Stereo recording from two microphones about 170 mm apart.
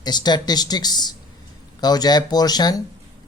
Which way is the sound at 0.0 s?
25° left (ahead or behind).